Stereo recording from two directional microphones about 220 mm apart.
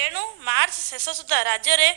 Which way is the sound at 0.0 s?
55° right (ahead or behind).